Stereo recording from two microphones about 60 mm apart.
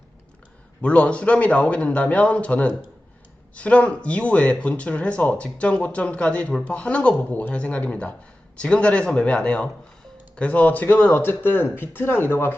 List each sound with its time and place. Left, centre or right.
0.8 s speech: left